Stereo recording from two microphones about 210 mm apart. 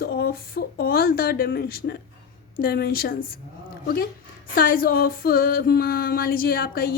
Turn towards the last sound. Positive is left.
turn(degrees=45)  # may be behind; listen again after turning